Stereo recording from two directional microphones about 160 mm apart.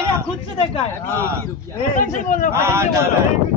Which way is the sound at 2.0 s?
55° left (ahead or behind).